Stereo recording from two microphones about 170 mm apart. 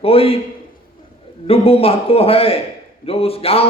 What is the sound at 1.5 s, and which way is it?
Speech, 35° left (ahead or behind).